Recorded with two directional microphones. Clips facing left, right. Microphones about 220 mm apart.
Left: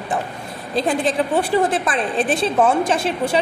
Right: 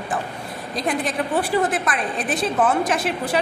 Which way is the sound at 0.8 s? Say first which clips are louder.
Left 5 dB; 30° left (ahead or behind).